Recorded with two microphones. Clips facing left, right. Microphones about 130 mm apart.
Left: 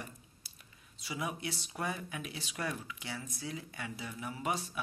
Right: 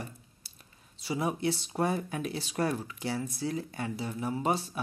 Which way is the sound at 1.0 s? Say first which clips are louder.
Right 8 dB; 30° right (ahead or behind).